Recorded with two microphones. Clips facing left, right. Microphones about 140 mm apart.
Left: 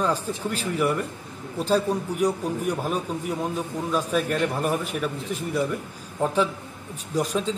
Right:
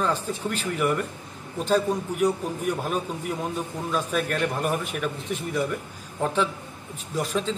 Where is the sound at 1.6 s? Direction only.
10° left (ahead or behind).